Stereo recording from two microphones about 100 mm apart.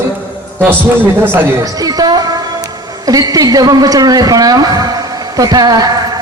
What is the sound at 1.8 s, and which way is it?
A woman's voice, 40° right (ahead or behind).